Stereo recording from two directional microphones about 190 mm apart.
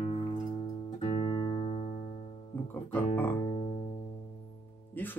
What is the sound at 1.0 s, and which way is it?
Music, 30° left (ahead or behind).